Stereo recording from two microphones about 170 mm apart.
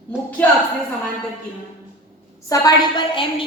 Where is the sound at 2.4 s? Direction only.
25° left (ahead or behind).